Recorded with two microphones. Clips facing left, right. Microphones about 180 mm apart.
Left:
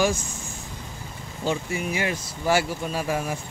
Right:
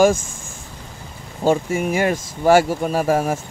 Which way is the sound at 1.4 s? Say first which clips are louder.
Right 9 dB; 50° right (ahead or behind).